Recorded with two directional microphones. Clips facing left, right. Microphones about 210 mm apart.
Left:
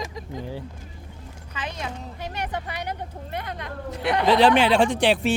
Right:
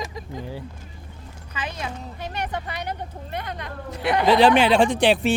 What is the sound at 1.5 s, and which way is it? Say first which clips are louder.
Speech: right 1 dB; 5° right (ahead or behind).